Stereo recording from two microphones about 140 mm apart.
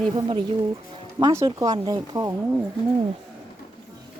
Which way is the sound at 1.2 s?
25° right (ahead or behind).